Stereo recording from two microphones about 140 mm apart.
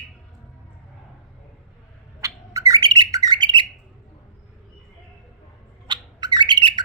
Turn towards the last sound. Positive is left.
turn(degrees=-35)  # may be behind; listen again after turning